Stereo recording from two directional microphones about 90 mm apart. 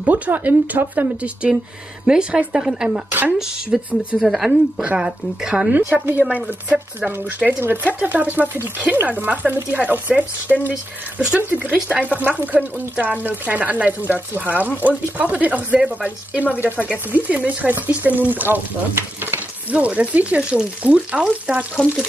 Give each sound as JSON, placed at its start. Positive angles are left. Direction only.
{"t": 0.0, "sound": "speech", "side_deg": -20}
{"t": 3.1, "sound": "speech", "side_deg": -20}
{"t": 3.7, "sound": "speech", "side_deg": -5}
{"t": 21.8, "sound": "speech", "side_deg": 10}